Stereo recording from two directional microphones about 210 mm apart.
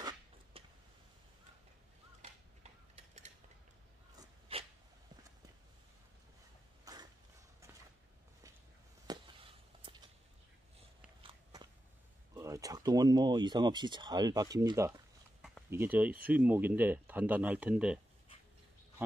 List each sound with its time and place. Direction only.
0.0 s a sound: 25° right (ahead or behind)
4.2 s dog: 25° right (ahead or behind)
6.8 s cough: 15° right (ahead or behind)
9.1 s a sound: 20° right (ahead or behind)
11.2 s walk: 20° right (ahead or behind)
12.4 s speech: 15° right (ahead or behind)